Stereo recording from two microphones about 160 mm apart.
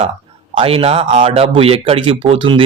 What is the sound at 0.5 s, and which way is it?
Speech, 35° right (ahead or behind).